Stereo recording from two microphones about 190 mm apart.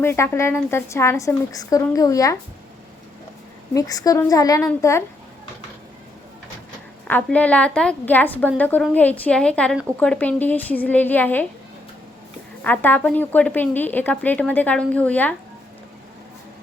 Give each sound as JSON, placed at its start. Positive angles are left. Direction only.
{"t": 0.0, "sound": "a woman's voice", "side_deg": 10}
{"t": 3.8, "sound": "a woman's voice", "side_deg": 20}
{"t": 7.1, "sound": "a woman's voice", "side_deg": 5}
{"t": 12.6, "sound": "a woman's voice", "side_deg": 10}